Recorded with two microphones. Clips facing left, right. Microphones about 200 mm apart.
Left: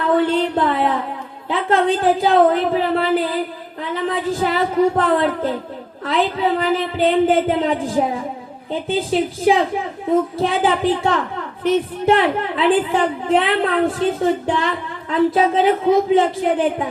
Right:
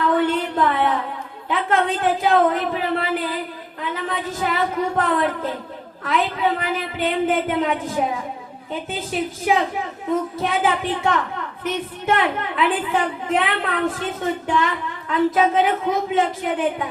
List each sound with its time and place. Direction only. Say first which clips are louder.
0.2 s a sound: left 3 dB; 30° left (ahead or behind)
1.5 s a woman's voice: left 4 dB; 30° left (ahead or behind)
4.1 s music: left 5 dB; 30° left (ahead or behind)
6.1 s a woman's voice: left 3 dB; 30° left (ahead or behind)